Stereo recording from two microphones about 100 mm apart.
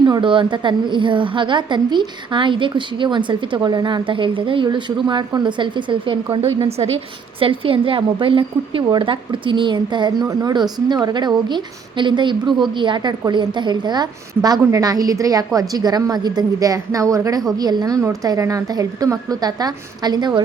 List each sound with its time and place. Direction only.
0.0 s a woman's voice: 50° right (ahead or behind)
6.6 s a woman's voice: 80° right; by 20.4 s 45° right (ahead or behind)